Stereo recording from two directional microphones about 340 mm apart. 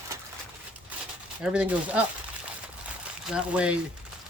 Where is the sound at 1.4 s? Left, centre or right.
Centre.